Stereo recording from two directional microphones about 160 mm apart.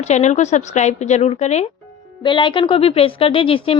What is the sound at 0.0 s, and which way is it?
A woman's voice, 45° left (ahead or behind).